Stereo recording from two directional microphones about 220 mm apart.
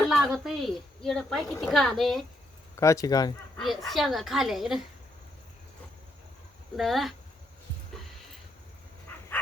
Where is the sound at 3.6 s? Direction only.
Centre (ahead or behind).